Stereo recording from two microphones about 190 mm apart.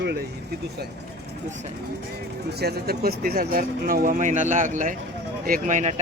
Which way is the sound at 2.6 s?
55° right (ahead or behind).